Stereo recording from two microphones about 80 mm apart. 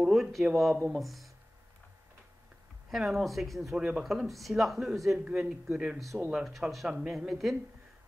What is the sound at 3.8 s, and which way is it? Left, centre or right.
Speech, centre.